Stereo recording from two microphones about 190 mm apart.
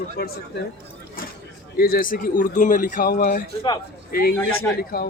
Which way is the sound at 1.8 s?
50° left (ahead or behind).